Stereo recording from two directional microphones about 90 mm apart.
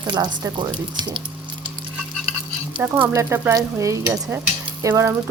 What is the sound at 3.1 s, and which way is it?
Speech, 30° right (ahead or behind).